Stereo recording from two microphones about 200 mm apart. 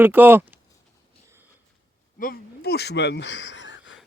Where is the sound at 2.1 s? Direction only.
45° left (ahead or behind); by 3.9 s 65° left (ahead or behind).